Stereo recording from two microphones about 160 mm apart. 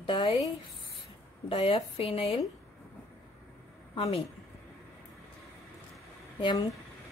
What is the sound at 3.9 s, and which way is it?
Speech, 35° left (ahead or behind).